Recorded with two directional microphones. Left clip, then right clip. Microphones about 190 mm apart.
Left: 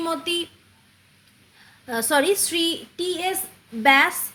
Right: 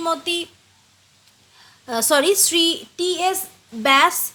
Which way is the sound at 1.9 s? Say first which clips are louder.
Right 3 dB; 45° right (ahead or behind).